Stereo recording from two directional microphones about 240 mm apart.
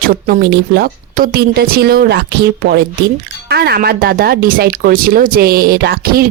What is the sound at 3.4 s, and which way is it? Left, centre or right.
Speech, right.